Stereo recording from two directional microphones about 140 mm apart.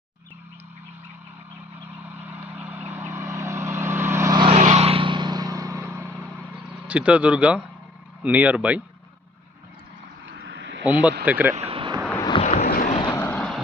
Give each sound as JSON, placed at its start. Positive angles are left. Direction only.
{"t": 2.2, "sound": "vehicle", "side_deg": -10}
{"t": 4.4, "sound": "vehicle", "side_deg": -45}
{"t": 8.2, "sound": "speech", "side_deg": -10}
{"t": 10.8, "sound": "speech", "side_deg": -10}
{"t": 11.5, "sound": "vehicle", "side_deg": -45}
{"t": 12.4, "sound": "boat", "side_deg": 50}
{"t": 12.6, "sound": "vehicle", "side_deg": 90}
{"t": 12.9, "sound": "vehicle", "side_deg": 35}
{"t": 13.1, "sound": "vehicle", "side_deg": 15}